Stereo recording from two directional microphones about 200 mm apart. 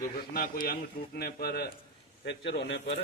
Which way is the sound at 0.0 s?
45° left (ahead or behind).